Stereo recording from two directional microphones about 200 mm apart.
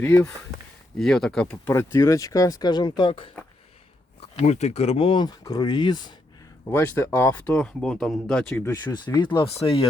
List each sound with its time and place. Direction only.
0.0 s speech: 10° left (ahead or behind)
4.4 s speech: 35° left (ahead or behind)